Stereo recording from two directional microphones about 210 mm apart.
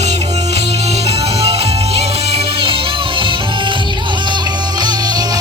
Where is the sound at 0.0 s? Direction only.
30° right (ahead or behind).